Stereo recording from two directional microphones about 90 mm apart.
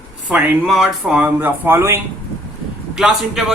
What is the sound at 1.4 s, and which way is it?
Speech, 25° right (ahead or behind).